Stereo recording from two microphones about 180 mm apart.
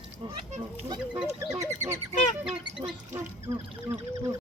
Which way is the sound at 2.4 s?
5° right (ahead or behind).